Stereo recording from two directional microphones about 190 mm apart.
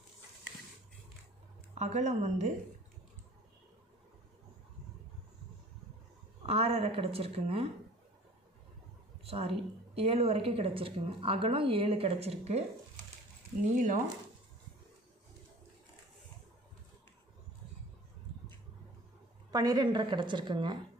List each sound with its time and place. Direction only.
1.7 s a woman's voice: 35° right (ahead or behind)
6.4 s a woman's voice: 30° right (ahead or behind)
9.2 s a woman's voice: 30° right (ahead or behind)
13.7 s a woman's voice: 40° right (ahead or behind)
19.5 s a woman's voice: 20° right (ahead or behind)